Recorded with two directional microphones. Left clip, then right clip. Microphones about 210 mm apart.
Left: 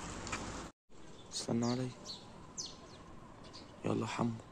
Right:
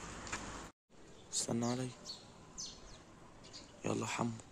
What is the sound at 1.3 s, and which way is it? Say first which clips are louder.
Speech: left 1 dB; 10° right (ahead or behind).